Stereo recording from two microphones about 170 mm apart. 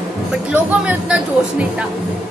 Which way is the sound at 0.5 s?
5° right (ahead or behind).